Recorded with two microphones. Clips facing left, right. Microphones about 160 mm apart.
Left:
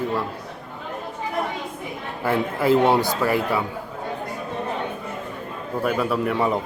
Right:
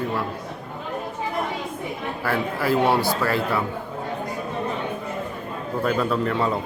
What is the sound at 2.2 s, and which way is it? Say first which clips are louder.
Speech: left 4 dB; 20° left (ahead or behind).